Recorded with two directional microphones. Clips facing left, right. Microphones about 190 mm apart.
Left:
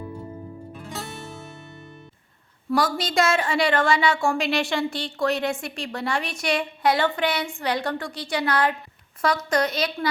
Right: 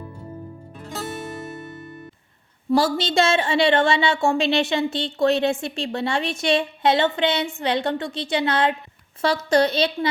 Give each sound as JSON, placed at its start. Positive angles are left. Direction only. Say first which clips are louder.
{"t": 2.6, "sound": "a woman's voice", "louder": "right 4 dB", "side_deg": -25}